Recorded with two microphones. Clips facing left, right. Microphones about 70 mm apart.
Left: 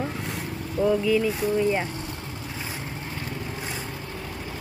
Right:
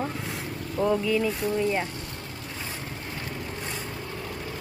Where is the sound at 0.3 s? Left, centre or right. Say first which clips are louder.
Left 1 dB; centre.